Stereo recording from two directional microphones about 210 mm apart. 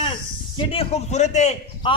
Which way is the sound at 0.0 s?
25° left (ahead or behind).